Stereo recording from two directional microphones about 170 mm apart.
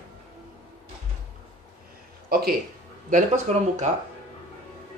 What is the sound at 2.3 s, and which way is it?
Speech, 65° right (ahead or behind).